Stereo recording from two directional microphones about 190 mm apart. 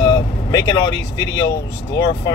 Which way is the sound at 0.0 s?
20° left (ahead or behind).